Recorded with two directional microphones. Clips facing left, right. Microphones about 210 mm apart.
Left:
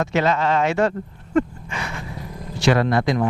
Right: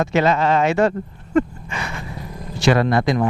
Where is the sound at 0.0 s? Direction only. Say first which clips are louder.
Right 2 dB; 10° right (ahead or behind).